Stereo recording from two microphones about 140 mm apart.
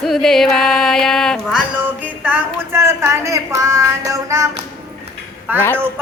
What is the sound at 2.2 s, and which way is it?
Speech, 15° right (ahead or behind).